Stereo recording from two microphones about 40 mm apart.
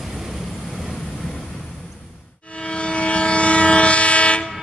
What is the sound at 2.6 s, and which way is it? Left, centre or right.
Train, left.